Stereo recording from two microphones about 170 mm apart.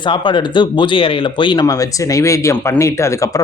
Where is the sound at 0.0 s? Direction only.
30° left (ahead or behind).